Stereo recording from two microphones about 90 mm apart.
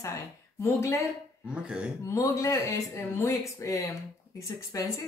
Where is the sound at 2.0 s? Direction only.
35° left (ahead or behind).